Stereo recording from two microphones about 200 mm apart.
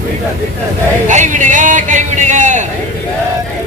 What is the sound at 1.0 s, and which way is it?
A man's voice, 40° right (ahead or behind).